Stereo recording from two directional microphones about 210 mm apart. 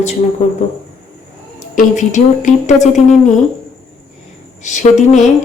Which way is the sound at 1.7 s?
35° left (ahead or behind).